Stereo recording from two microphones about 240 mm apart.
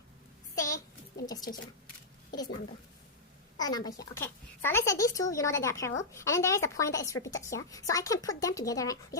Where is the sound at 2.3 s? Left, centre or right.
Centre.